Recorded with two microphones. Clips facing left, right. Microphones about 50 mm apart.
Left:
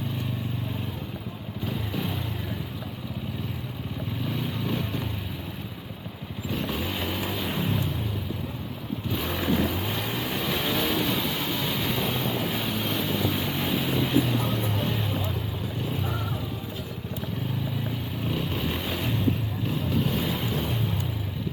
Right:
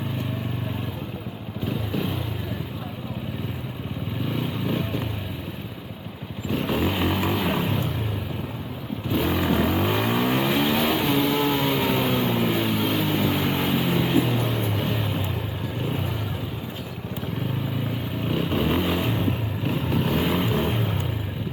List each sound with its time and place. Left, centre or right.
4.3 s vehicle: centre
6.6 s vehicle: right
9.2 s vehicle: centre
9.7 s vehicle: right
10.6 s vehicle: centre
11.4 s a sound: right; by 13.1 s centre
13.1 s vehicle: right
13.7 s vehicle: right
13.9 s music: right
18.3 s vehicle: right